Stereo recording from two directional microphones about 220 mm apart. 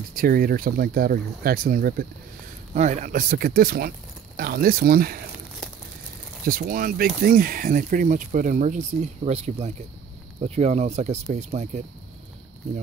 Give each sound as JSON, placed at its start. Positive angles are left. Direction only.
{"t": 0.1, "sound": "speech", "side_deg": -40}
{"t": 6.4, "sound": "speech", "side_deg": -40}